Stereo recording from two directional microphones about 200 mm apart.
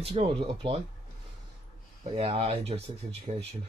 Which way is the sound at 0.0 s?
30° right (ahead or behind).